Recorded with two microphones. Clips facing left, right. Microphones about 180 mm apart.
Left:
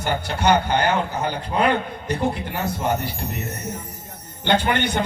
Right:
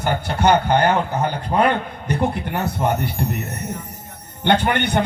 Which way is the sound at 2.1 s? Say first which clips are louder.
Right 2 dB; 60° right (ahead or behind).